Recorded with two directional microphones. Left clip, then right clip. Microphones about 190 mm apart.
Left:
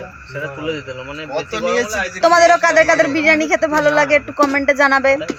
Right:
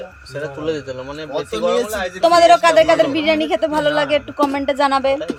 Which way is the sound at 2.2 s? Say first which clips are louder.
Even; 5° left (ahead or behind).